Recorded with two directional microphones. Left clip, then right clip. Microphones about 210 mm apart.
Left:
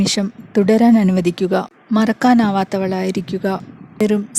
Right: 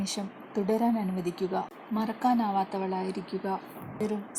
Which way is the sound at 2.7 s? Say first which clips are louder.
Left 12 dB; 45° left (ahead or behind).